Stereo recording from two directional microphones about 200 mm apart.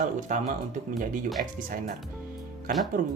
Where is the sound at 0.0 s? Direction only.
40° right (ahead or behind).